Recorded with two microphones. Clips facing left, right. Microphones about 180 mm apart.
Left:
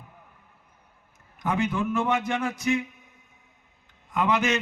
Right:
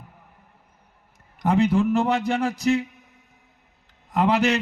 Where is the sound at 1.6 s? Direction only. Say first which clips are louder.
Right 5 dB; 35° right (ahead or behind).